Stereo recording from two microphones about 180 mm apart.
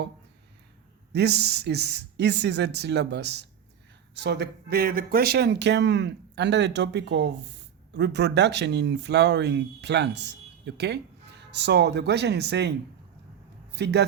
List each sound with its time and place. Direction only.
1.1 s speech: 65° right (ahead or behind)
13.7 s speech: 70° right (ahead or behind)